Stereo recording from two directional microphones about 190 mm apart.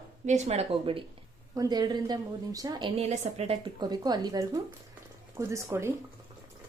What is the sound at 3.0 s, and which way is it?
A woman's voice, 35° right (ahead or behind).